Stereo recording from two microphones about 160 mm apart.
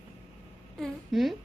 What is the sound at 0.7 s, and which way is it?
Speech, centre (ahead or behind).